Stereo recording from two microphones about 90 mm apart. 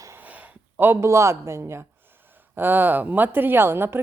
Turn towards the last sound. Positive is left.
turn(degrees=-25)  # may be behind; listen again after turning